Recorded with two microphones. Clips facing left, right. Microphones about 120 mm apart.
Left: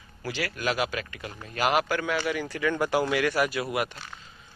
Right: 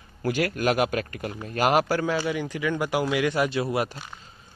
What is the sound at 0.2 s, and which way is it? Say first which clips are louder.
Speech: right 6 dB; 50° right (ahead or behind).